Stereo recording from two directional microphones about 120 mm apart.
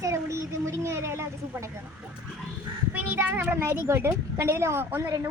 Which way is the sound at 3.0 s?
15° right (ahead or behind).